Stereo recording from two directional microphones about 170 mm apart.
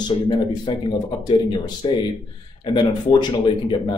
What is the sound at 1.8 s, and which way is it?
Speech, 25° left (ahead or behind).